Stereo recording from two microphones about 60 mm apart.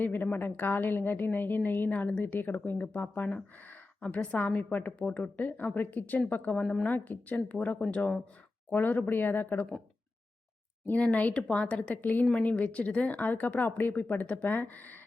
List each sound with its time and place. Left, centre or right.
0.0 s a woman's voice: left
10.8 s a woman's voice: left